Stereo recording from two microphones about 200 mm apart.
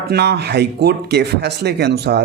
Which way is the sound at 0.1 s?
55° right (ahead or behind).